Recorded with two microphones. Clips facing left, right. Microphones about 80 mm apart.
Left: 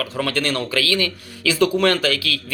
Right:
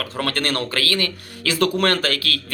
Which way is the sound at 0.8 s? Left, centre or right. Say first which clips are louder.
Left 2 dB; right.